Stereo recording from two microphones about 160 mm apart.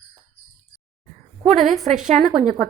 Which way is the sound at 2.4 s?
50° right (ahead or behind).